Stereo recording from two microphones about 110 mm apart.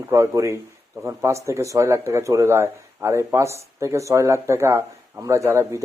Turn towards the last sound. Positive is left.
turn(degrees=-25)  # may be behind; listen again after turning